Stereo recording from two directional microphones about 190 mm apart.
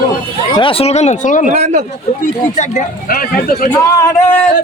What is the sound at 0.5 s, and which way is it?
Speech, 30° left (ahead or behind).